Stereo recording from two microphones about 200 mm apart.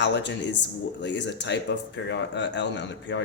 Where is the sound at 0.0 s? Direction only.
60° left (ahead or behind).